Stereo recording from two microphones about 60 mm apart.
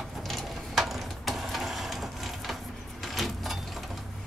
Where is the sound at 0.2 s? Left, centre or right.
Centre.